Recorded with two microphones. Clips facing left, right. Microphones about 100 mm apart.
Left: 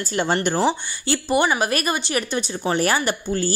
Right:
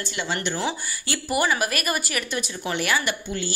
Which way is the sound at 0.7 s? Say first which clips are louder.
Left 7 dB; 30° left (ahead or behind).